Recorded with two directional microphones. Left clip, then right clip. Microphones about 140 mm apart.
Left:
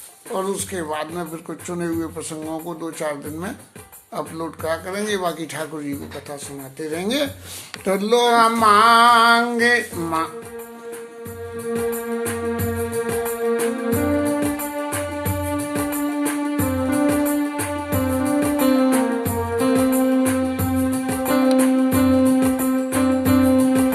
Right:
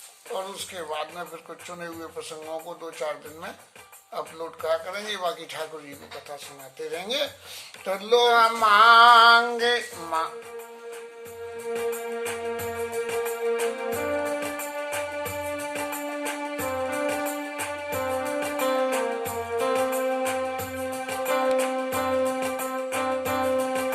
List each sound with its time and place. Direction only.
0.3 s speech: 15° left (ahead or behind)
6.8 s speech: 15° left (ahead or behind)
7.9 s a sound: 15° left (ahead or behind)
11.7 s music: 25° left (ahead or behind)